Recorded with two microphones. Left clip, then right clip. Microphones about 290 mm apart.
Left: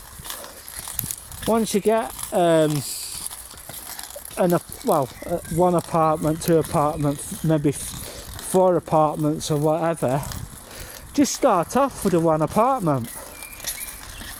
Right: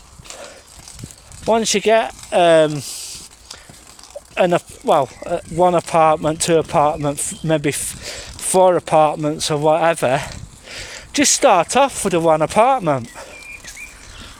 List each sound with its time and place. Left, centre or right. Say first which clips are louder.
1.6 s speech: right 5 dB; right
1.9 s speech: right 7 dB; right
4.4 s speech: right 5 dB; right
5.7 s speech: right 6 dB; right
6.7 s speech: right 6 dB; right